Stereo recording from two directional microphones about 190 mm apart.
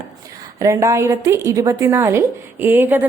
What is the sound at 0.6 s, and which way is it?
A woman's voice, 15° right (ahead or behind).